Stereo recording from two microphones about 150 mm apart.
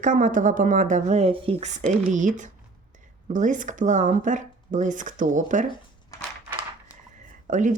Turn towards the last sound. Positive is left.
turn(degrees=-55)  # may be behind; listen again after turning